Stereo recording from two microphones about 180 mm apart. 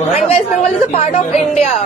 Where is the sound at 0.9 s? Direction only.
40° left (ahead or behind).